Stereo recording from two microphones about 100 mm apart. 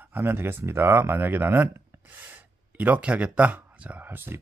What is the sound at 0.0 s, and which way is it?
Speech, 20° right (ahead or behind).